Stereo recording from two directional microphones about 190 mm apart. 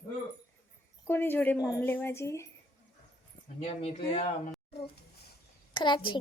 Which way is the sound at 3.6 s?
35° left (ahead or behind).